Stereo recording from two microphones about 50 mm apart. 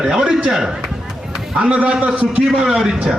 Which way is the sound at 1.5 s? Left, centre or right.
Right.